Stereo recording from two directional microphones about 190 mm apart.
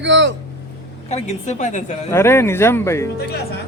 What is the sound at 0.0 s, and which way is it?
Speech, 75° right (ahead or behind).